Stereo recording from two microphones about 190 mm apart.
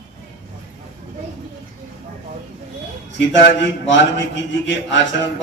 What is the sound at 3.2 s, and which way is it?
A man's voice, 70° left (ahead or behind).